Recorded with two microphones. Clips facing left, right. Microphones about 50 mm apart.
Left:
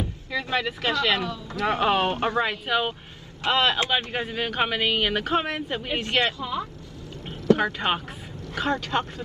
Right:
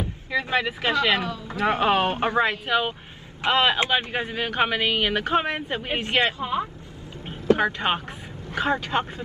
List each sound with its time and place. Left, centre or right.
0.0 s speech: centre
2.4 s speech: centre
3.4 s speech: centre
6.4 s speech: right
7.2 s vehicle: centre
8.5 s speech: centre